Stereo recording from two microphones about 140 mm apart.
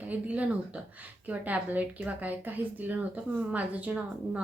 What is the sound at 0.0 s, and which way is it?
A woman's voice, 10° right (ahead or behind).